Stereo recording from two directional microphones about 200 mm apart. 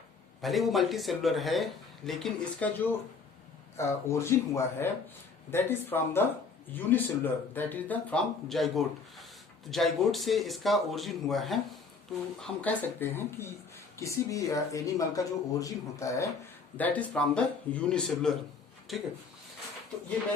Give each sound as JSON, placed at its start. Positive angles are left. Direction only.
{"t": 0.4, "sound": "speech", "side_deg": 0}